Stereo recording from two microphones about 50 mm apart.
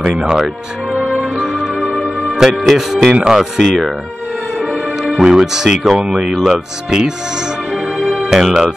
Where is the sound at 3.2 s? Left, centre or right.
Centre.